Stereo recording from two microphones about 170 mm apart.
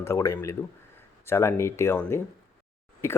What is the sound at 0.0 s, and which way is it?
Speech, 15° left (ahead or behind).